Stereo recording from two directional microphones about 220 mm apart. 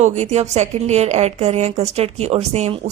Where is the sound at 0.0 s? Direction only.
30° right (ahead or behind).